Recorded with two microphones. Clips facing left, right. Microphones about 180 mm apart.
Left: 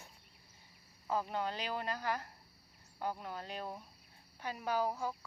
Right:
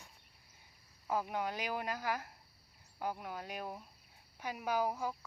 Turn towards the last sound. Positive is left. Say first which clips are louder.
# even
turn(degrees=-10)  # may be behind; listen again after turning